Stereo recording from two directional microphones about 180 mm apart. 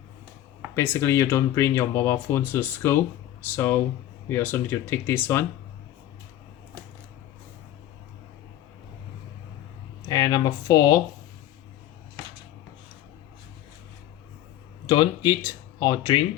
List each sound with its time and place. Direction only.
0.8 s speech: 15° left (ahead or behind)
10.1 s speech: 20° left (ahead or behind)
14.8 s speech: 25° left (ahead or behind)